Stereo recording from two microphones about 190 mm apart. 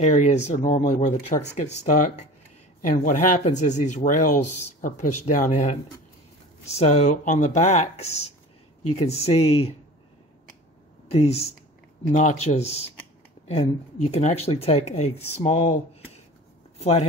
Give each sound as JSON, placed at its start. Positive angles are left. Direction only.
{"t": 0.0, "sound": "speech", "side_deg": 35}
{"t": 11.1, "sound": "speech", "side_deg": 30}
{"t": 16.7, "sound": "a sound", "side_deg": 35}